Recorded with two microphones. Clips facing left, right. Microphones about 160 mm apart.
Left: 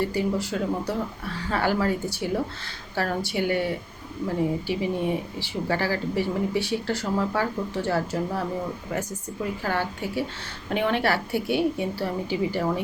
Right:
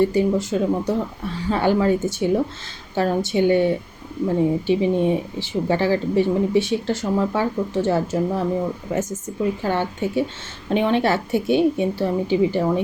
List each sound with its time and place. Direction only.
0.0 s speech: 20° right (ahead or behind)